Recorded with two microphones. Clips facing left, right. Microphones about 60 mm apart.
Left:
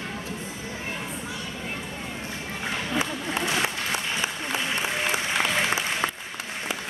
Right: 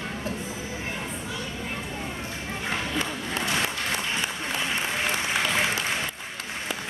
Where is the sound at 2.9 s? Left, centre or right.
Centre.